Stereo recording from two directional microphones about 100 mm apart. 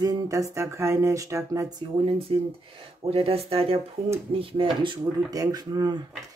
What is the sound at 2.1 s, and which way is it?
Speech, 70° right (ahead or behind).